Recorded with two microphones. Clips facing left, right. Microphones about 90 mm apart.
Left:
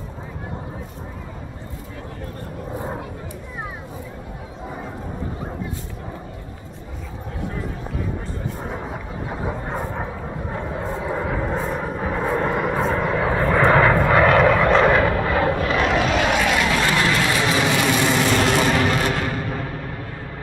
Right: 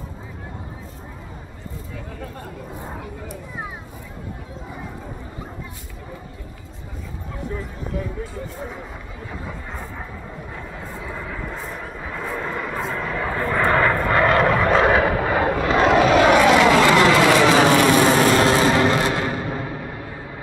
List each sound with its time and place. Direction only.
9.3 s vehicle: 25° left (ahead or behind)
9.7 s bow-wow: 30° left (ahead or behind)
10.5 s vehicle: 30° left (ahead or behind)
13.7 s vehicle: 5° left (ahead or behind)
15.2 s vehicle: 20° right (ahead or behind)
15.7 s vehicle: 35° right (ahead or behind)
16.1 s vehicle: 50° right (ahead or behind); by 19.9 s 15° right (ahead or behind)